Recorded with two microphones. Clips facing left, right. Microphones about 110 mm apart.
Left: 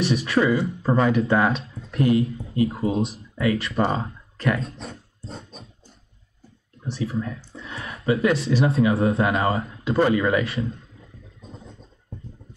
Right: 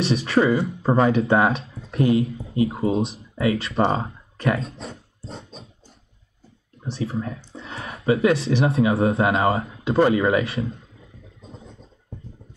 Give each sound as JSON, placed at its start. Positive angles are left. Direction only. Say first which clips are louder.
{"t": 0.0, "sound": "speech", "louder": "right 1 dB", "side_deg": -30}
{"t": 4.6, "sound": "speech", "louder": "even", "side_deg": 0}
{"t": 6.8, "sound": "speech", "louder": "even", "side_deg": -30}